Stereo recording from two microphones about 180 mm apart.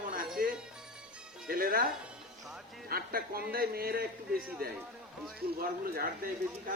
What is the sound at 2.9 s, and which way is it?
A man's voice, 55° right (ahead or behind).